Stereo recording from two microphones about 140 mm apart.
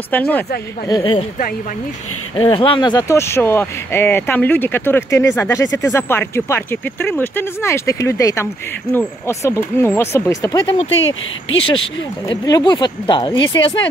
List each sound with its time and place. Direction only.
0.1 s speech: 10° left (ahead or behind)
0.8 s speech: 30° left (ahead or behind)
2.3 s speech: 35° left (ahead or behind)
3.1 s speech: 20° left (ahead or behind)
12.3 s speech: 30° left (ahead or behind)